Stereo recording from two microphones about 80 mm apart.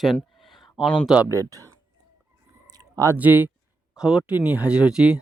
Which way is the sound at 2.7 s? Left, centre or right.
Right.